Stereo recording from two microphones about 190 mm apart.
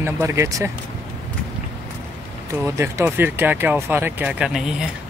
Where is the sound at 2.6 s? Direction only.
15° right (ahead or behind).